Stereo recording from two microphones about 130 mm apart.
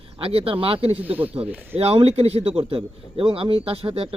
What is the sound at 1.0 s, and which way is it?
Speech, 10° right (ahead or behind).